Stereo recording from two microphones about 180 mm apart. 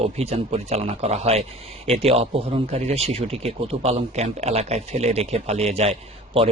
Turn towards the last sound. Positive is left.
turn(degrees=-35)  # may be behind; listen again after turning